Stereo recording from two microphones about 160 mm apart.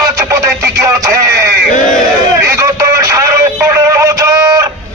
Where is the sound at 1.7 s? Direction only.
50° left (ahead or behind).